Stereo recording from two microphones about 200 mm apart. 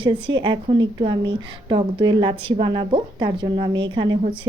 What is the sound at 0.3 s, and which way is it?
A woman's voice, 20° right (ahead or behind).